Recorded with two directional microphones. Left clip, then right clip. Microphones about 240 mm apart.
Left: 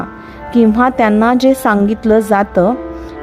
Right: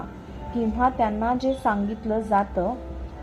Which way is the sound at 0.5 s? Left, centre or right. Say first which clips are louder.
Left 12 dB; left.